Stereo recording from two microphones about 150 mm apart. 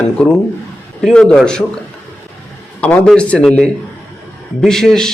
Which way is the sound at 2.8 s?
10° left (ahead or behind).